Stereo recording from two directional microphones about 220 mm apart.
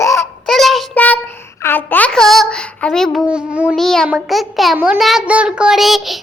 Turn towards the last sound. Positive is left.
turn(degrees=0)  # may be behind; listen again after turning